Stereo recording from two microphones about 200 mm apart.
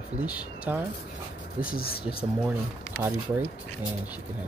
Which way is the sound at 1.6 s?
45° left (ahead or behind).